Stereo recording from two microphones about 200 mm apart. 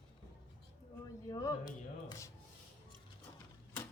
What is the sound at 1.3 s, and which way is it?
Speech, 20° left (ahead or behind).